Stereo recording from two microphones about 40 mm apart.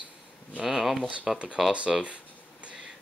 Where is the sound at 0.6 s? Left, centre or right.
Centre.